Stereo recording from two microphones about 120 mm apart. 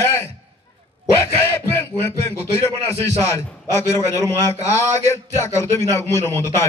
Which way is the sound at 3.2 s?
25° left (ahead or behind).